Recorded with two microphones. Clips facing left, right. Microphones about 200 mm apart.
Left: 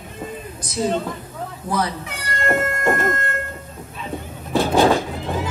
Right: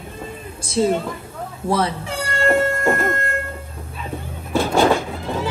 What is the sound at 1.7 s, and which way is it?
Cat, 30° right (ahead or behind).